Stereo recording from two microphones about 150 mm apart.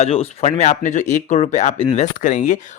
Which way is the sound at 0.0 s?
40° left (ahead or behind).